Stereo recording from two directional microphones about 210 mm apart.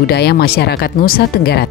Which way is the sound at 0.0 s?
50° left (ahead or behind).